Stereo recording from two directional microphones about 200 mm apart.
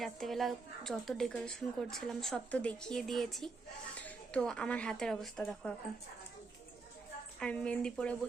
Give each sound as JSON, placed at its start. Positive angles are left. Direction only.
{"t": 0.0, "sound": "a woman's voice", "side_deg": 0}
{"t": 7.3, "sound": "a woman's voice", "side_deg": 5}